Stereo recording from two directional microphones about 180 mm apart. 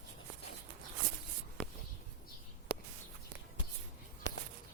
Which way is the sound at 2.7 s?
55° left (ahead or behind).